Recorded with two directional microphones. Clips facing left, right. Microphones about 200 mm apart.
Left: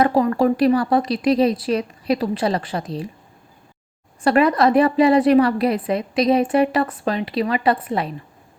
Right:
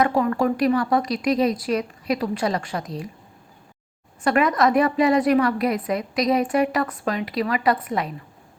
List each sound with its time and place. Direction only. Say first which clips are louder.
0.0 s a woman's voice: left 3 dB; 30° left (ahead or behind)
4.2 s a woman's voice: left 3 dB; 35° left (ahead or behind)